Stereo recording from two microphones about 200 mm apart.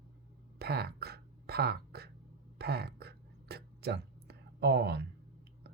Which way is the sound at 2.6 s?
55° right (ahead or behind).